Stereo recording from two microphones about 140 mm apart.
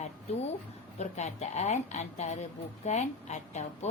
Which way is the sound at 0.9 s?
55° left (ahead or behind).